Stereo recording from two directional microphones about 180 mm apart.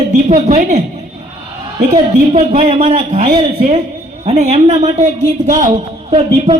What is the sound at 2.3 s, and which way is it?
A man's voice, 40° right (ahead or behind).